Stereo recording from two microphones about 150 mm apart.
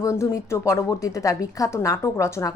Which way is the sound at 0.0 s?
20° left (ahead or behind).